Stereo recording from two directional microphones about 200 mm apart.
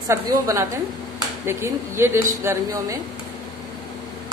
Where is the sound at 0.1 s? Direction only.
15° right (ahead or behind).